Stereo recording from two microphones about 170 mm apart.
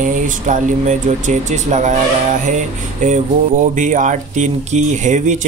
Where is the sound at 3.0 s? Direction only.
50° right (ahead or behind).